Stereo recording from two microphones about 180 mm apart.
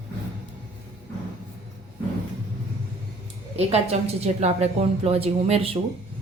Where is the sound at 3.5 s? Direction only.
35° right (ahead or behind).